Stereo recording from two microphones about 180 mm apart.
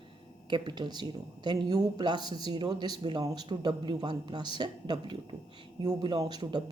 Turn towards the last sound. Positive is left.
turn(degrees=-20)  # may be behind; listen again after turning